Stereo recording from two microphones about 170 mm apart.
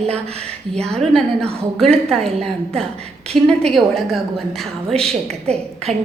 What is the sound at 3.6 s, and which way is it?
A woman's voice, centre (ahead or behind).